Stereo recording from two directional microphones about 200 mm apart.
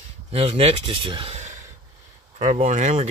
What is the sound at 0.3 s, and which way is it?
Speech, 30° right (ahead or behind).